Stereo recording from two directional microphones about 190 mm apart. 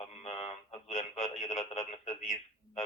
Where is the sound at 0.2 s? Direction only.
35° left (ahead or behind).